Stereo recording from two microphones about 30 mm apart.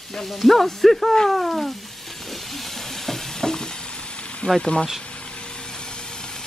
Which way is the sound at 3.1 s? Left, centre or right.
Centre.